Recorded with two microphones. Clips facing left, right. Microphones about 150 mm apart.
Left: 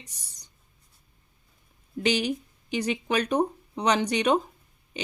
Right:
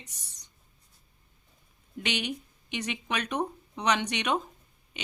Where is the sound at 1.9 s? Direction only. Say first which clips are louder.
Left 7 dB; 35° left (ahead or behind).